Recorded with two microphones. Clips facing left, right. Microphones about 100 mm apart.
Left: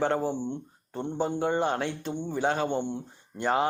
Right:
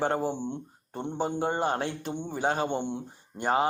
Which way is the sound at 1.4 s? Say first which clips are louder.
Left 1 dB; 45° right (ahead or behind).